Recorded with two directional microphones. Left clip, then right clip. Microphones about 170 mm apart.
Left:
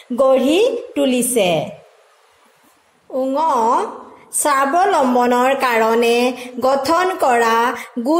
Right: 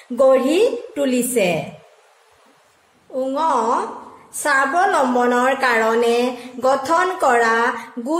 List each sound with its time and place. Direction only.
0.1 s a woman's voice: 25° left (ahead or behind)
3.1 s a woman's voice: 35° left (ahead or behind)